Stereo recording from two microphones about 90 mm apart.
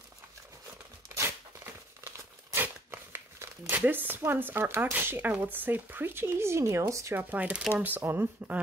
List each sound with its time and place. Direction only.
1.0 s a sound: 30° right (ahead or behind)
2.0 s crumpling: 30° right (ahead or behind)
2.6 s speech: 25° right (ahead or behind)